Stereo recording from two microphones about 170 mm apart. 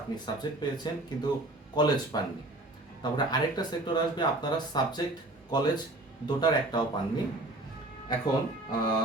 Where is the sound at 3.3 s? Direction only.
25° left (ahead or behind).